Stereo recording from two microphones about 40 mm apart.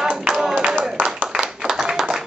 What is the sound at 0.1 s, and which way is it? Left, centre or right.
Clapping, centre.